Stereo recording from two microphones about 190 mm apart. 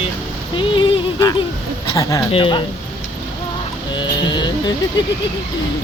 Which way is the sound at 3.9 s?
25° left (ahead or behind).